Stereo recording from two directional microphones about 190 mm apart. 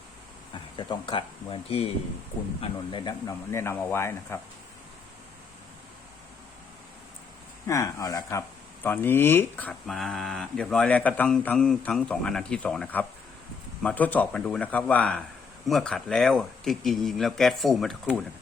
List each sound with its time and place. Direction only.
0.5 s speech: 25° left (ahead or behind)
7.7 s speech: 15° left (ahead or behind); by 18.2 s centre (ahead or behind)